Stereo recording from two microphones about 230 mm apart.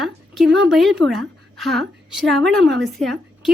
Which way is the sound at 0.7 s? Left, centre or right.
Centre.